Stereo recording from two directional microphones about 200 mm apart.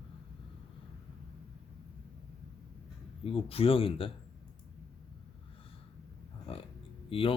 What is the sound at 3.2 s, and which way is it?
Speech, 30° left (ahead or behind).